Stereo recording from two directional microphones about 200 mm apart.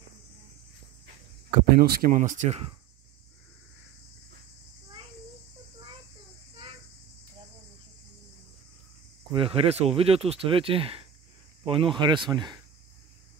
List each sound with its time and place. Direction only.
1.8 s speech: 50° right (ahead or behind)
9.3 s speech: 25° right (ahead or behind)